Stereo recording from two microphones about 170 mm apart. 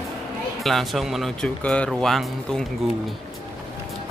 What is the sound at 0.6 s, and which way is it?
Speech, centre (ahead or behind).